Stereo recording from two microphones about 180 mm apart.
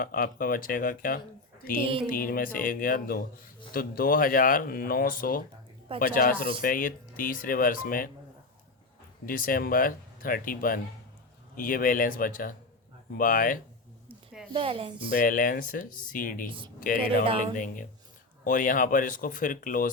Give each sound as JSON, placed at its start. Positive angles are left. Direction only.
{"t": 0.0, "sound": "a man's voice", "side_deg": 50}
{"t": 1.8, "sound": "speech", "side_deg": -30}
{"t": 2.0, "sound": "a man's voice", "side_deg": 50}
{"t": 9.2, "sound": "a man's voice", "side_deg": 50}
{"t": 14.5, "sound": "speech", "side_deg": -30}
{"t": 15.1, "sound": "a man's voice", "side_deg": 50}
{"t": 16.5, "sound": "speech", "side_deg": -30}
{"t": 16.8, "sound": "a man's voice", "side_deg": 50}